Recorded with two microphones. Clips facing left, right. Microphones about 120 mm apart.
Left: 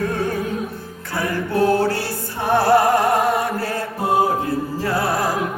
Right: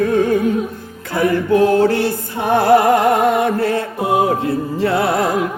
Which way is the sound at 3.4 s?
60° right (ahead or behind).